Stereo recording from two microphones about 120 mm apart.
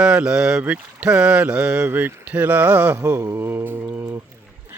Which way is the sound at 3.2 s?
25° right (ahead or behind).